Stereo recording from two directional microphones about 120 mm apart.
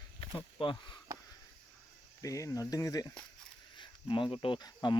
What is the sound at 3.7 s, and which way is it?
Cricket, 40° left (ahead or behind).